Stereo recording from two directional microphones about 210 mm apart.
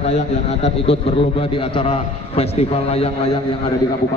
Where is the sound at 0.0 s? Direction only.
30° left (ahead or behind).